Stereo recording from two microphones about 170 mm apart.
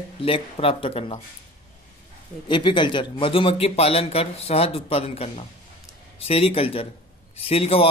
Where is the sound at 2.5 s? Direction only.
30° left (ahead or behind).